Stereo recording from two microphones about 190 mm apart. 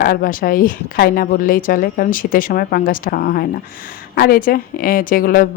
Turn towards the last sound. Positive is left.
turn(degrees=50)  # may be behind; listen again after turning